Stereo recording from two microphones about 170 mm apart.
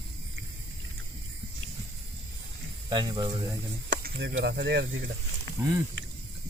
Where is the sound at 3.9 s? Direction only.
80° right.